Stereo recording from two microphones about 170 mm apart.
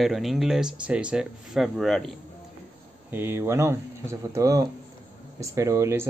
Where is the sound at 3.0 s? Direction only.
15° right (ahead or behind).